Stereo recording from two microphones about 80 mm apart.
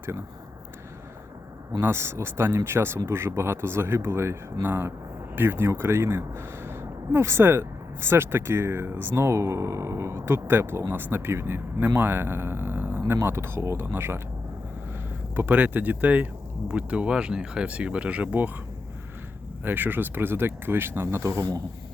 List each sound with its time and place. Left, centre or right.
1.8 s speech: right
15.4 s speech: right
19.6 s speech: right